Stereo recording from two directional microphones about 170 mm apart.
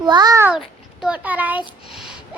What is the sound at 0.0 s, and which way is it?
Speech, 25° right (ahead or behind).